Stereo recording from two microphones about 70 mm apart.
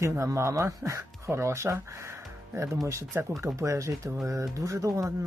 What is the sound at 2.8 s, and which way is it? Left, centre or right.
Speech, right.